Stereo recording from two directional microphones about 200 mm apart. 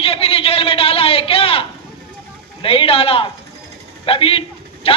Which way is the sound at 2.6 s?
30° left (ahead or behind).